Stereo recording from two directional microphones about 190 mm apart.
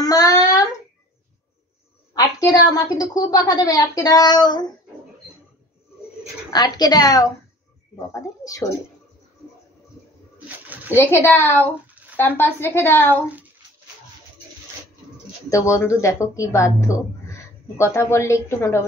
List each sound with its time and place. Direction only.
0.0 s a sound: 20° left (ahead or behind)
2.1 s a woman's voice: 20° left (ahead or behind)
6.5 s a woman's voice: 20° left (ahead or behind)
11.0 s a woman's voice: 10° left (ahead or behind)
15.5 s a woman's voice: 15° left (ahead or behind)